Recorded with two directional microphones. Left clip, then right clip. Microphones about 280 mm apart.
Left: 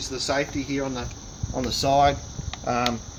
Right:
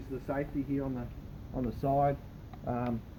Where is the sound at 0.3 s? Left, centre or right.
Centre.